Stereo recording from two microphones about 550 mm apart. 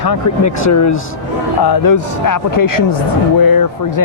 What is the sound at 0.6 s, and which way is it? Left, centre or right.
Speech, left.